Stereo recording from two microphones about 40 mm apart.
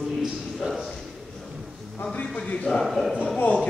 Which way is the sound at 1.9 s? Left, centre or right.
Left.